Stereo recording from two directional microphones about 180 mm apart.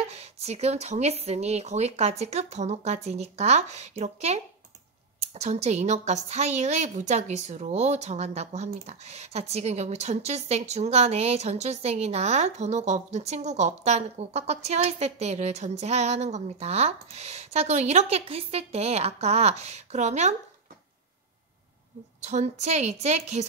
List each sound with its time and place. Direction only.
0.0 s a woman's voice: 35° right (ahead or behind)
22.2 s a woman's voice: 40° right (ahead or behind)